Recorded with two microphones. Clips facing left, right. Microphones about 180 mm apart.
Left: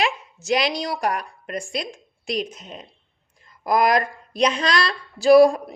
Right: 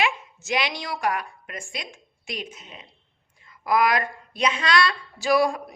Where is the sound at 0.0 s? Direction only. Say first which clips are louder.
Left 2 dB; 35° left (ahead or behind).